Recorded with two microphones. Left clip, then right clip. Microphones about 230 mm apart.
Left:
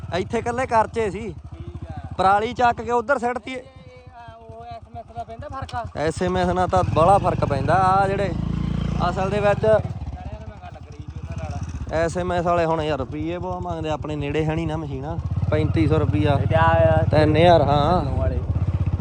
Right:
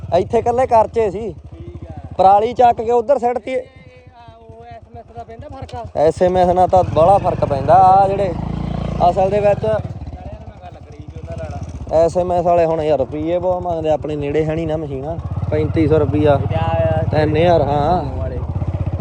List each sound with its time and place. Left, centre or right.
0.1 s speech: centre
5.9 s speech: centre
7.7 s speech: left
8.0 s vehicle: centre
9.1 s speech: centre
11.6 s speech: centre
13.4 s speech: left
13.7 s speech: centre